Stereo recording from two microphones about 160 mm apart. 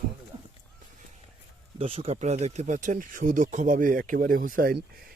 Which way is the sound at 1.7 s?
35° right (ahead or behind).